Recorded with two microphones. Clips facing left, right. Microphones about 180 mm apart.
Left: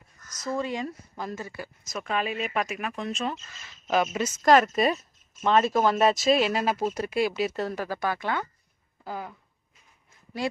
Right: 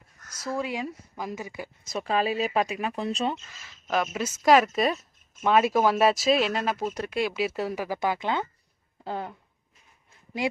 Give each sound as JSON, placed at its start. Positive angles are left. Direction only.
{"t": 0.3, "sound": "speech", "side_deg": -10}
{"t": 1.9, "sound": "speech", "side_deg": -30}
{"t": 3.8, "sound": "speech", "side_deg": 0}